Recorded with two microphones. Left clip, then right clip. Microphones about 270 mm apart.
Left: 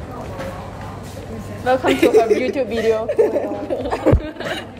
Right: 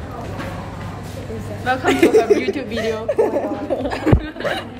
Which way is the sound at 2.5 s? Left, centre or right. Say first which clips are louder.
Left 4 dB; left.